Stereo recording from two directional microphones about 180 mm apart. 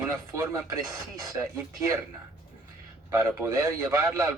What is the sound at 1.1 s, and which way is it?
Speech, 20° right (ahead or behind).